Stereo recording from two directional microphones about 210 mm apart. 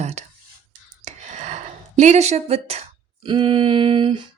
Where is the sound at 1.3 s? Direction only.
35° right (ahead or behind).